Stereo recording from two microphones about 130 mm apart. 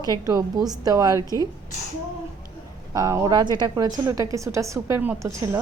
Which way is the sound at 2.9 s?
25° right (ahead or behind).